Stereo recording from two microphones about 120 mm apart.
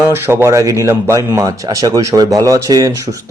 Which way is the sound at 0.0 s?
20° right (ahead or behind).